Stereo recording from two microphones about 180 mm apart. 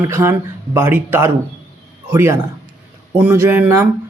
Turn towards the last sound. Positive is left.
turn(degrees=-15)  # may be behind; listen again after turning